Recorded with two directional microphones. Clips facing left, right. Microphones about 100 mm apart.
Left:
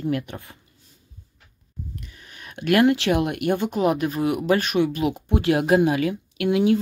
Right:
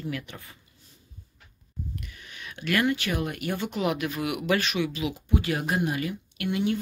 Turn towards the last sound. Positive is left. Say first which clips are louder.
# left 8 dB
turn(degrees=90)